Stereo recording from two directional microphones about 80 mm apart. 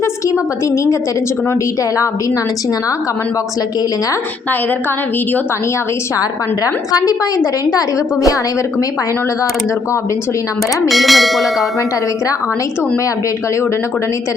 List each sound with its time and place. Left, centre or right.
6.9 s a woman's voice: left
10.8 s bell: centre